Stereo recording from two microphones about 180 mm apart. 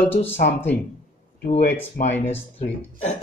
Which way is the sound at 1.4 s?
45° left (ahead or behind).